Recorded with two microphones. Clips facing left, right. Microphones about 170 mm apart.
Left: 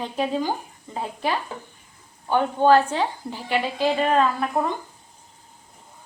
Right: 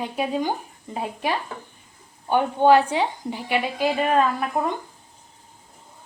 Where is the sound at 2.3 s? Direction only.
15° right (ahead or behind).